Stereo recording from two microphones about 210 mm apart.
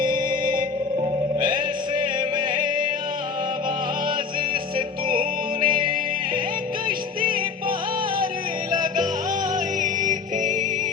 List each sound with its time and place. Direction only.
0.0 s music: 20° right (ahead or behind)
5.5 s music: 25° right (ahead or behind)
6.8 s music: 40° right (ahead or behind)
9.8 s music: 40° right (ahead or behind)